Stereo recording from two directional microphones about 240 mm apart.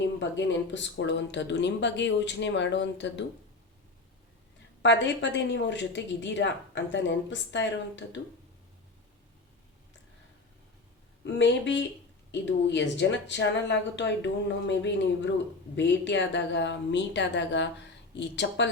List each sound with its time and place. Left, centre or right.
0.2 s a woman's voice: left
4.8 s a woman's voice: left
11.2 s a woman's voice: left